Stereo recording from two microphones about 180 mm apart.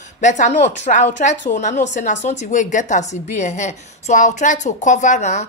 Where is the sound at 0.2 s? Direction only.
45° left (ahead or behind).